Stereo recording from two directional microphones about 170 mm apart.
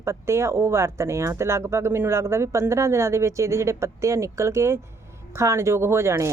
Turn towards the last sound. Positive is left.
turn(degrees=-15)  # may be behind; listen again after turning